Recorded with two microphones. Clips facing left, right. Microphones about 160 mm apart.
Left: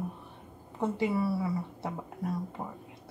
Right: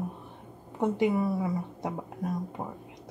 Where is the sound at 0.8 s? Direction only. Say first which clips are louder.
Right 3 dB; 15° right (ahead or behind).